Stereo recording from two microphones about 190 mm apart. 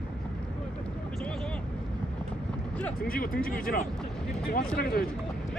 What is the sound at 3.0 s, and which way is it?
Speech, 50° left (ahead or behind).